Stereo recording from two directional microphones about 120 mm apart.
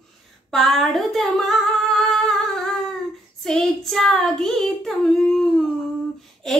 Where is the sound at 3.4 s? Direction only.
Centre (ahead or behind).